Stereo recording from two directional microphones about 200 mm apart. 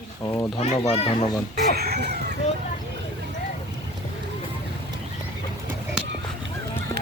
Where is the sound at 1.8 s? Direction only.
50° right (ahead or behind).